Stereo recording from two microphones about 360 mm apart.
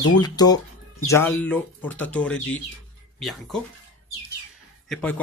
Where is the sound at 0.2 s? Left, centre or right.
Centre.